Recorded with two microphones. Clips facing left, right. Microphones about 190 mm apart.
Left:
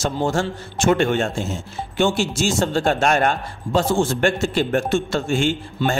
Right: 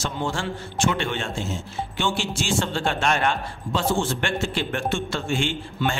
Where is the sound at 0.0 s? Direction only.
45° left (ahead or behind).